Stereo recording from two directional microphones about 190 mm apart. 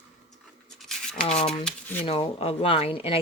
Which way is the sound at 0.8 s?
5° left (ahead or behind).